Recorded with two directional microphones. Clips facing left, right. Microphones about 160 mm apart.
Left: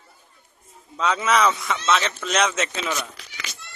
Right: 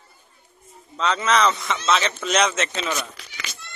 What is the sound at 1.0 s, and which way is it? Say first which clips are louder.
A man's voice: even; 5° left (ahead or behind).